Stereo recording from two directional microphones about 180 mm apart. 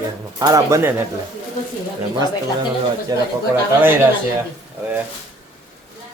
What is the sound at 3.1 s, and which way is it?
Speech, 20° right (ahead or behind).